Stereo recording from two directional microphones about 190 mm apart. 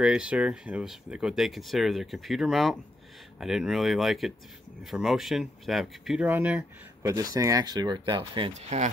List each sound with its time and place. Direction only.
0.0 s speech: 5° right (ahead or behind); by 8.8 s 35° right (ahead or behind)